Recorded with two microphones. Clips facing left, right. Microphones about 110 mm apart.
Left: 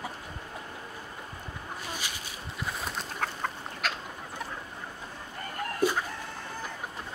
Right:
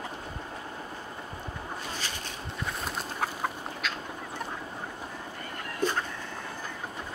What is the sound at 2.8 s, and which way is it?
Chicken, 10° right (ahead or behind).